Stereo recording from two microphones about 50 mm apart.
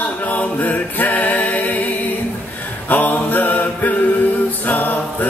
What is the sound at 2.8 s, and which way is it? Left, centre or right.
Mantra, left.